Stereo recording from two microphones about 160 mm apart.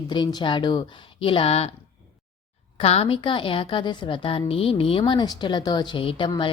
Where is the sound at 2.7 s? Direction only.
40° left (ahead or behind).